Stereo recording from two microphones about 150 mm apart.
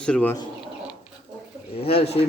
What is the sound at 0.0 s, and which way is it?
Speech, 10° left (ahead or behind).